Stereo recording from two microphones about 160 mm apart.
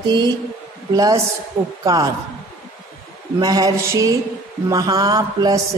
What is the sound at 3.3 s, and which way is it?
A man's voice, 25° right (ahead or behind).